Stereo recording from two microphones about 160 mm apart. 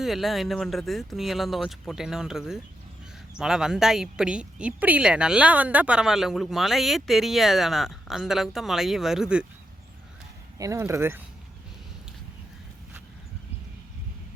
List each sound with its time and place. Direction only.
0.0 s a woman's voice: centre (ahead or behind)
10.6 s speech: 20° right (ahead or behind)